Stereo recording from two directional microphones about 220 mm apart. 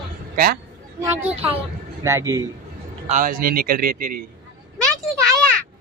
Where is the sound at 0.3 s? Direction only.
45° right (ahead or behind).